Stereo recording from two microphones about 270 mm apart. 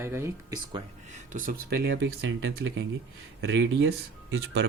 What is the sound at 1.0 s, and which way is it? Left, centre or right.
Speech, right.